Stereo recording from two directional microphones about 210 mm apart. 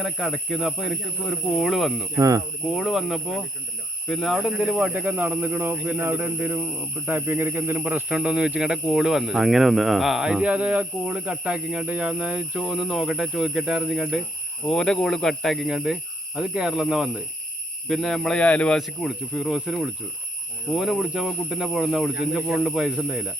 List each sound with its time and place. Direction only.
0.0 s speech: centre (ahead or behind)
2.1 s a man's voice: 15° right (ahead or behind)
2.6 s a man's voice: centre (ahead or behind)